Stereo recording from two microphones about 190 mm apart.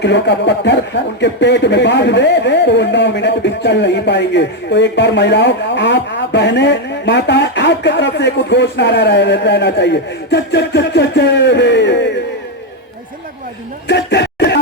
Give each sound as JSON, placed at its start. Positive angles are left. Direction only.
{"t": 0.0, "sound": "speech", "side_deg": 65}
{"t": 13.8, "sound": "speech", "side_deg": 65}